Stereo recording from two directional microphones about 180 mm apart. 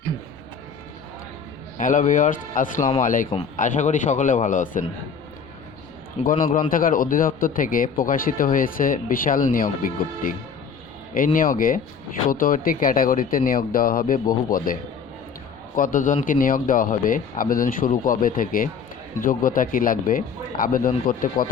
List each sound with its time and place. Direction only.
1.8 s a man's voice: 45° left (ahead or behind)
6.2 s a man's voice: 45° left (ahead or behind)